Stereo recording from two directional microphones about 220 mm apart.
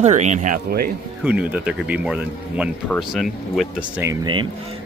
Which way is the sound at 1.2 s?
5° right (ahead or behind).